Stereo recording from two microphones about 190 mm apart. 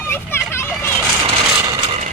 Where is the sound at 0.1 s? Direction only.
10° left (ahead or behind).